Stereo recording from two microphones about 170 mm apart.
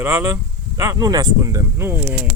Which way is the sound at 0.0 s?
20° right (ahead or behind).